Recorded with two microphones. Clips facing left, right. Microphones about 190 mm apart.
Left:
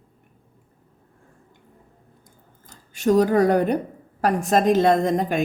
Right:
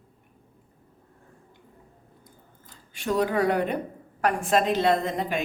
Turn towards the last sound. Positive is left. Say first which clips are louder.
# left 6 dB
turn(degrees=45)  # may be behind; listen again after turning